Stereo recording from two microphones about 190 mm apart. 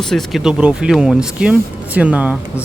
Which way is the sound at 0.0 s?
Centre (ahead or behind).